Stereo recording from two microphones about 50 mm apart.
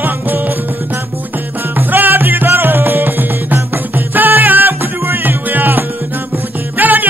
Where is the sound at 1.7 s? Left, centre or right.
Right.